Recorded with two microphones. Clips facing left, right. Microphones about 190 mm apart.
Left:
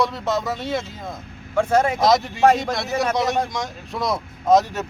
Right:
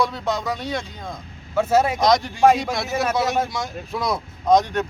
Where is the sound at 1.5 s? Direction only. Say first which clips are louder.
Even; 5° right (ahead or behind).